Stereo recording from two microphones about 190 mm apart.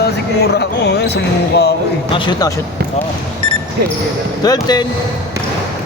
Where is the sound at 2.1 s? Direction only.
25° left (ahead or behind).